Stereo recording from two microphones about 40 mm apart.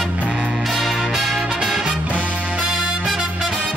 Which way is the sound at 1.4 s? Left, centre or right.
Centre.